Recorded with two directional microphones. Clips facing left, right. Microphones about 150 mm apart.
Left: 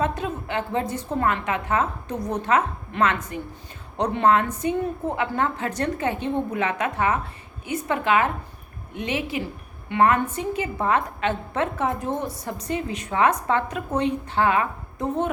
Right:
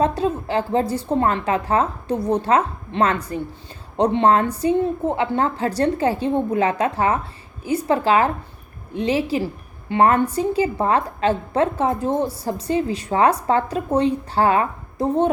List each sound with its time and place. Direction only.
0.0 s a woman's voice: 35° right (ahead or behind)